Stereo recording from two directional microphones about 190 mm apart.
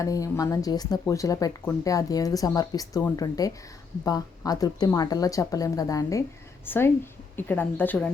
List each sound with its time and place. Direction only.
0.0 s a woman's voice: 15° left (ahead or behind)